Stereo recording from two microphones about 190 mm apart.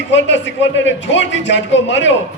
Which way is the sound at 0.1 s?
70° left (ahead or behind).